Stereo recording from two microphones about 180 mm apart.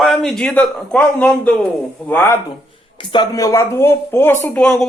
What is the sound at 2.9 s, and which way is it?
Speech, 25° left (ahead or behind).